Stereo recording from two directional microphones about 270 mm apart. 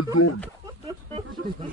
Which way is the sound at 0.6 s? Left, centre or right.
Centre.